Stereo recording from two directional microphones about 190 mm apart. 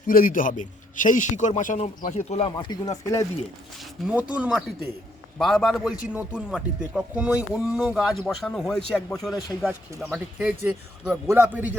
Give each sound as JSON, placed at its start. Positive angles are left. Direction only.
{"t": 0.1, "sound": "a man's voice", "side_deg": 50}
{"t": 2.6, "sound": "speech", "side_deg": 20}
{"t": 4.0, "sound": "speech", "side_deg": -5}